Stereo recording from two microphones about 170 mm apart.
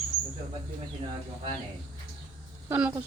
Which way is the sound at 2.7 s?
15° right (ahead or behind).